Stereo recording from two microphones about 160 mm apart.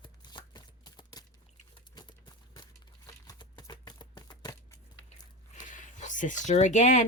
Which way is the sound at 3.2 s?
25° left (ahead or behind).